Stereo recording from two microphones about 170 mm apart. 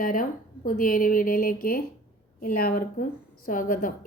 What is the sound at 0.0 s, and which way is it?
A woman's voice, 55° left (ahead or behind).